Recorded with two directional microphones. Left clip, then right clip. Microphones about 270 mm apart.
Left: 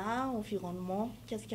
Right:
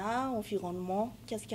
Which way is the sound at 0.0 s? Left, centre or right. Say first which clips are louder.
Right 2 dB; right.